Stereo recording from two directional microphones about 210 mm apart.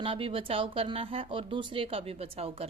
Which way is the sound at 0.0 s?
25° right (ahead or behind).